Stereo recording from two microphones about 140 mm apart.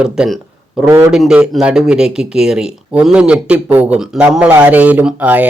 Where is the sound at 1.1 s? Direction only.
5° right (ahead or behind).